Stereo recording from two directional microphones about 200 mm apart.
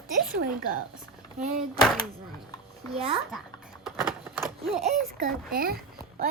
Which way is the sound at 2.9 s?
30° right (ahead or behind).